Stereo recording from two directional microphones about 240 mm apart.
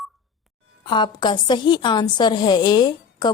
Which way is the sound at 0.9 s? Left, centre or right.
Centre.